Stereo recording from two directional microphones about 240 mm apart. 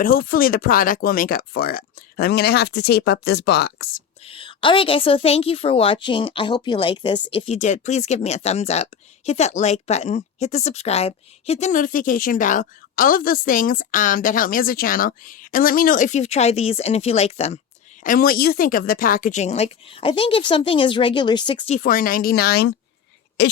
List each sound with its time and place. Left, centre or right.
0.0 s speech: left
4.2 s a woman's voice: left
18.0 s a woman's voice: left; by 21.8 s centre
21.8 s speech: left
23.4 s a sound: left